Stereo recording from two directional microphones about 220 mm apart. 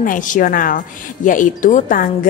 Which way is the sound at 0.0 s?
35° left (ahead or behind).